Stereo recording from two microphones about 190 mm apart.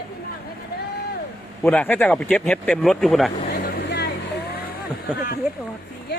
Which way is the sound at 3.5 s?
60° left (ahead or behind).